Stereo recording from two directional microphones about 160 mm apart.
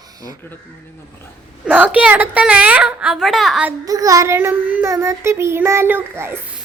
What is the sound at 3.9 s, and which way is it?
A woman's voice, 20° right (ahead or behind).